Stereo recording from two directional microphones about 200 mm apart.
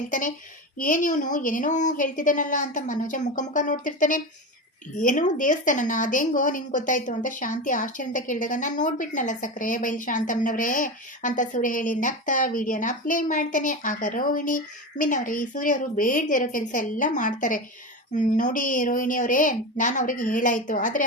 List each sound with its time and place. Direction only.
0.1 s a woman's voice: 40° left (ahead or behind)